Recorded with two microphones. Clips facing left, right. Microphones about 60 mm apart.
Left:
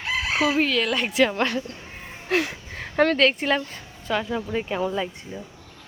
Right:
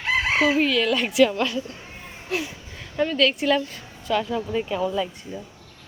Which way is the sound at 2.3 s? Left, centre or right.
Left.